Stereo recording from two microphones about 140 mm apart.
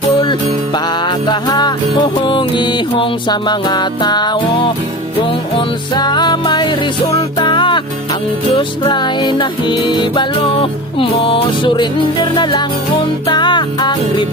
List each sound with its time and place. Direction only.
0.7 s music: 30° left (ahead or behind)